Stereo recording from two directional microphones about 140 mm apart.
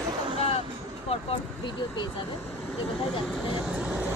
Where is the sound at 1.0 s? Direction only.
40° left (ahead or behind).